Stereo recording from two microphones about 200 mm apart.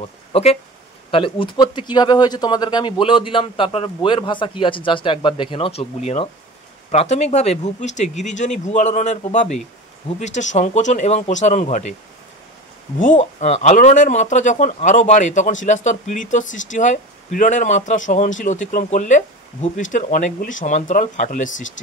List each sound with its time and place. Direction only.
0.0 s speech: 30° left (ahead or behind)
13.0 s speech: 35° left (ahead or behind)